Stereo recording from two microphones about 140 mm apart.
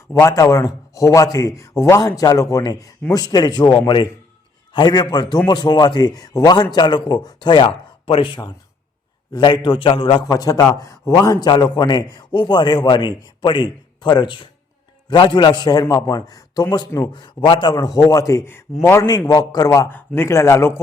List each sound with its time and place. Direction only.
0.1 s a man's voice: 25° left (ahead or behind)
10.2 s a man's voice: 25° left (ahead or behind)
19.3 s speech: 30° left (ahead or behind)